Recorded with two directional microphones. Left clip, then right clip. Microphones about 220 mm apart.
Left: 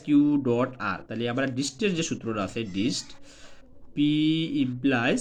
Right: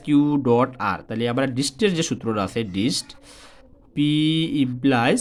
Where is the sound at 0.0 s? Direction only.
40° right (ahead or behind).